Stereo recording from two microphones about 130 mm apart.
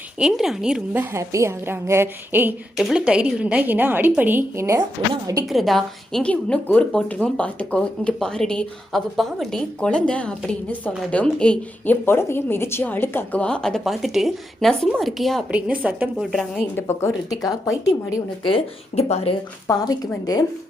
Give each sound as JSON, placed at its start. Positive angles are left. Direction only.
{"t": 0.2, "sound": "a woman's voice", "side_deg": -5}
{"t": 1.1, "sound": "a woman's voice", "side_deg": -25}
{"t": 2.7, "sound": "a woman's voice", "side_deg": -5}
{"t": 5.5, "sound": "a woman's voice", "side_deg": 0}
{"t": 15.5, "sound": "a woman's voice", "side_deg": -10}
{"t": 16.2, "sound": "a woman's voice", "side_deg": 0}
{"t": 16.7, "sound": "a woman's voice", "side_deg": 20}
{"t": 17.2, "sound": "speech", "side_deg": 30}
{"t": 18.4, "sound": "speech", "side_deg": 50}
{"t": 19.6, "sound": "speech", "side_deg": 30}